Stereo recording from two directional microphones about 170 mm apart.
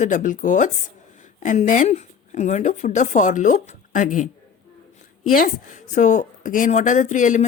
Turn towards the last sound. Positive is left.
turn(degrees=45)  # may be behind; listen again after turning